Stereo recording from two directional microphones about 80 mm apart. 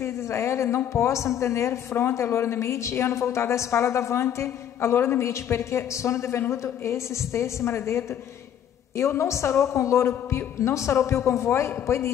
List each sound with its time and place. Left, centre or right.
0.0 s a woman's voice: left